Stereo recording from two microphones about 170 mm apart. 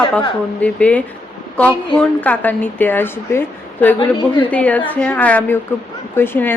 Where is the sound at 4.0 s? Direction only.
25° left (ahead or behind).